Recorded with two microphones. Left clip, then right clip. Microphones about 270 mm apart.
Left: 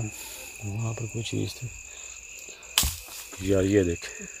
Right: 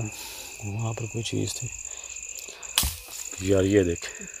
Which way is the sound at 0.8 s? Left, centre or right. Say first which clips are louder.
Right 3 dB; centre.